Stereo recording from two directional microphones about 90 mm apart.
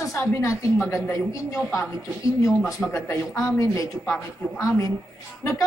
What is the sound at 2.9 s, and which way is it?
Speech, 30° left (ahead or behind).